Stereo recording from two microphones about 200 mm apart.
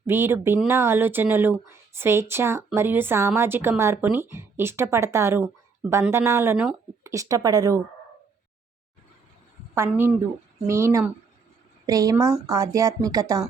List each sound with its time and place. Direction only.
0.1 s speech: 10° right (ahead or behind)
9.7 s speech: 10° right (ahead or behind)